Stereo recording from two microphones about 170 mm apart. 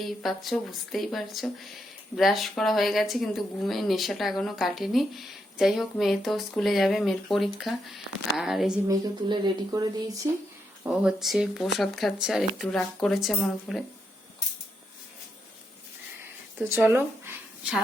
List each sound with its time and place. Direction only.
0.0 s speech: centre (ahead or behind)
8.9 s speech: 25° right (ahead or behind)
10.8 s speech: 5° right (ahead or behind)
16.6 s speech: 10° right (ahead or behind)